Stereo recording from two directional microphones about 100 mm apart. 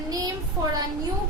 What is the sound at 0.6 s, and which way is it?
Speech, 30° right (ahead or behind).